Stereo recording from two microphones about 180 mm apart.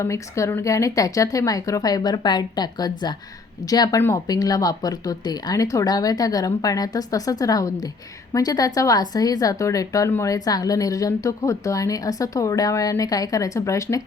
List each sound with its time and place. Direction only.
0.0 s speech: 15° left (ahead or behind)